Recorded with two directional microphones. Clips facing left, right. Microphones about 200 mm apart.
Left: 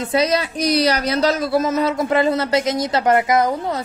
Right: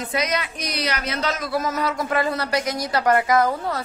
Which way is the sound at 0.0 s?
30° left (ahead or behind).